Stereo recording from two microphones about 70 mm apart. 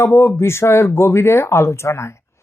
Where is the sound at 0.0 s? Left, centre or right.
Left.